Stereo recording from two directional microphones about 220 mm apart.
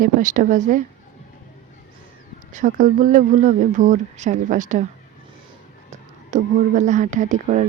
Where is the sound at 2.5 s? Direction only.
35° right (ahead or behind).